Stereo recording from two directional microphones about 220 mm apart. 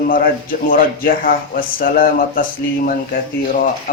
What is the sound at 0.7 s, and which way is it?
Speech, 40° left (ahead or behind).